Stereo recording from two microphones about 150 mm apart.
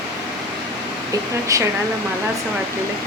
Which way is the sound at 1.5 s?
25° right (ahead or behind).